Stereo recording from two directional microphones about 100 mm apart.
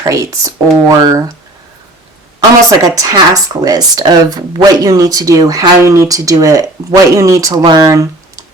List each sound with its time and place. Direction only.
0.0 s speech: 35° right (ahead or behind)
2.6 s speech: 35° right (ahead or behind)